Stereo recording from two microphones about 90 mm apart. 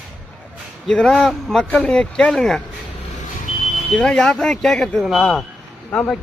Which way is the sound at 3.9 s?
5° left (ahead or behind).